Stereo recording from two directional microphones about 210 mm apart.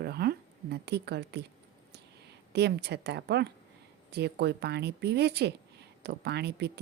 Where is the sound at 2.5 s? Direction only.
50° right (ahead or behind).